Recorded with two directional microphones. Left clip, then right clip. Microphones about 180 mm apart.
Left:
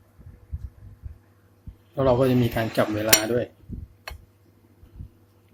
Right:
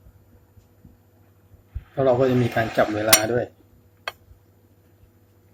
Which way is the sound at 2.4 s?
15° left (ahead or behind).